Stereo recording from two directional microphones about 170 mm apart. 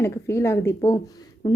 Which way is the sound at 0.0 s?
15° left (ahead or behind).